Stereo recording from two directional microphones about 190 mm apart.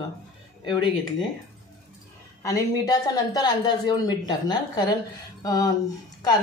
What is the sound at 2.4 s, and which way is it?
A woman's voice, 20° left (ahead or behind).